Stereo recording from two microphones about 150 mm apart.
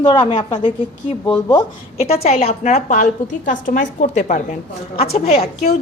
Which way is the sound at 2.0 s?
45° left (ahead or behind).